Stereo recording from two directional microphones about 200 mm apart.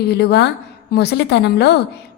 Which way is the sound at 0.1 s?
55° left (ahead or behind).